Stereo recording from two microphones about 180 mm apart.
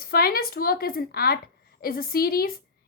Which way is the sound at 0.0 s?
55° left (ahead or behind).